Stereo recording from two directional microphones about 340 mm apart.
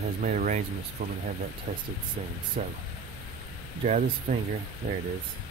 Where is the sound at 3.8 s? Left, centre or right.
Right.